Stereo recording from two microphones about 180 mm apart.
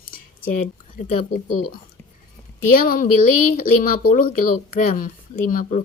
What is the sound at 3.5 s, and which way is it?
Speech, 50° left (ahead or behind).